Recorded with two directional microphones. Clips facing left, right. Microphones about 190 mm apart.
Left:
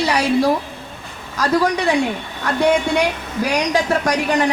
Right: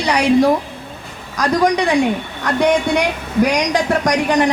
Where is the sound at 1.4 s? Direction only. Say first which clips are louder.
Right 2 dB; 15° right (ahead or behind).